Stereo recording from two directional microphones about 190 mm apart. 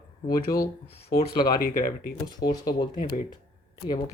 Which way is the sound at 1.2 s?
25° left (ahead or behind).